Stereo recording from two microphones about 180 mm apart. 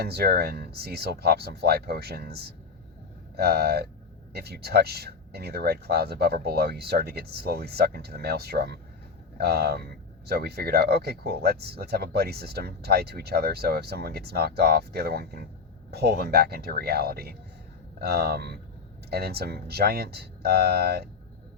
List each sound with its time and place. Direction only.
0.0 s speech: 60° right (ahead or behind)